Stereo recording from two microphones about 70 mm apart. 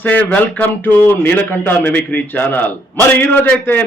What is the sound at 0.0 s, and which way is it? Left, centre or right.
Speech, left.